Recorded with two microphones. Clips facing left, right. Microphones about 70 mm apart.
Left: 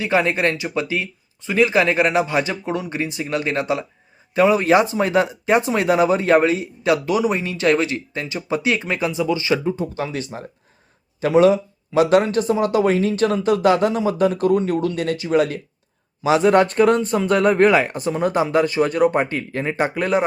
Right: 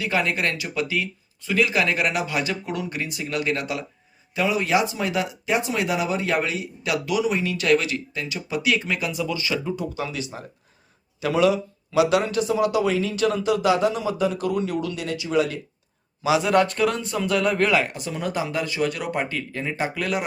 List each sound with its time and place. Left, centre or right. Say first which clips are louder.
0.0 s speech: left 5 dB; left
4.4 s speech: left 7 dB; left
16.2 s speech: left 4 dB; left